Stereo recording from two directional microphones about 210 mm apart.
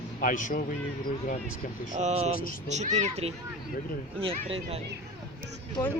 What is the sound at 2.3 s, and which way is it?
Speech, 40° left (ahead or behind).